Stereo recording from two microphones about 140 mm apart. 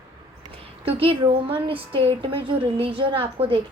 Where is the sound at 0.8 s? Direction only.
40° right (ahead or behind).